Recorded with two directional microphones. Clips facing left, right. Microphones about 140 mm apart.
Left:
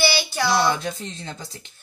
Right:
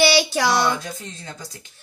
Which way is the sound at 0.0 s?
90° right.